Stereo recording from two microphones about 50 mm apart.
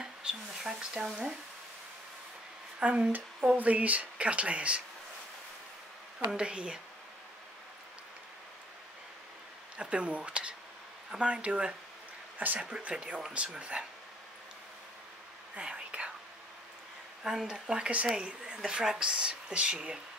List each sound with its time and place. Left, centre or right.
0.0 s speech: centre
2.8 s speech: right
6.1 s speech: centre
9.8 s speech: right
15.5 s whispering: right
17.2 s speech: centre